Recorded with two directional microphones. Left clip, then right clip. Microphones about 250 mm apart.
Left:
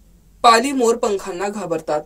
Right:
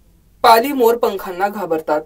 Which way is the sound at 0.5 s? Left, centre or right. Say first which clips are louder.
Right 3 dB; centre.